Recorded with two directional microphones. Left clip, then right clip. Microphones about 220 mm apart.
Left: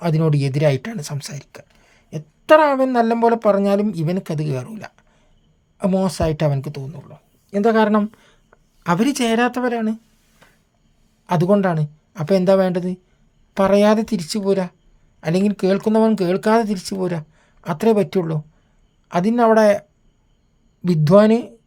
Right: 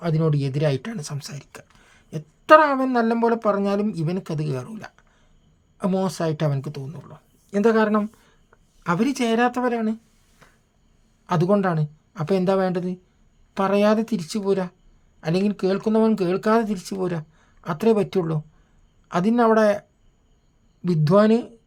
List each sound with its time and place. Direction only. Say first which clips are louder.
0.0 s speech: left 4 dB; 20° left (ahead or behind)
11.3 s speech: left 4 dB; 15° left (ahead or behind)
20.8 s speech: left 5 dB; 15° left (ahead or behind)